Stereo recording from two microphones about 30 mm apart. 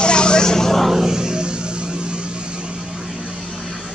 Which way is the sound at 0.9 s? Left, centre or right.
Centre.